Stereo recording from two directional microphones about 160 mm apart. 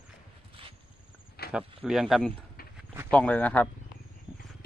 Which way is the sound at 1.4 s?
80° left.